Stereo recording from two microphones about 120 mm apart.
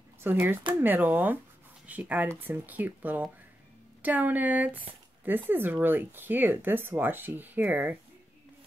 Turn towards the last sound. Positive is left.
turn(degrees=-15)  # may be behind; listen again after turning